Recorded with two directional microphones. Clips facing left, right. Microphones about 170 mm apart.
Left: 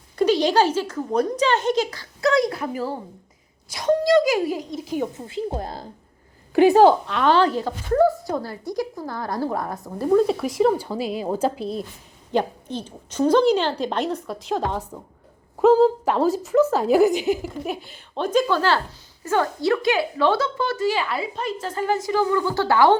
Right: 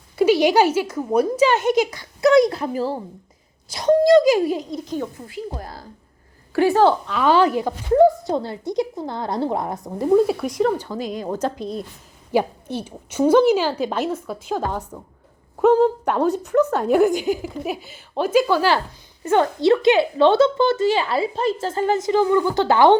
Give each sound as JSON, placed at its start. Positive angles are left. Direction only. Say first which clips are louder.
{"t": 0.2, "sound": "a woman's voice", "louder": "right 3 dB", "side_deg": -10}
{"t": 4.7, "sound": "speech", "louder": "even", "side_deg": 10}
{"t": 5.1, "sound": "a woman's voice", "louder": "left 4 dB", "side_deg": 25}
{"t": 7.1, "sound": "a woman's voice", "louder": "right 2 dB", "side_deg": -5}
{"t": 12.3, "sound": "a woman's voice", "louder": "right 2 dB", "side_deg": -10}